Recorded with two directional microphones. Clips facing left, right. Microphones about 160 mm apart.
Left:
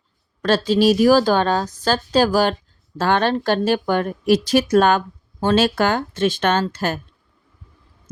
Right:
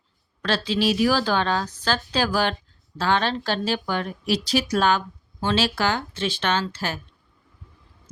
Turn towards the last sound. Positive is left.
turn(degrees=50)  # may be behind; listen again after turning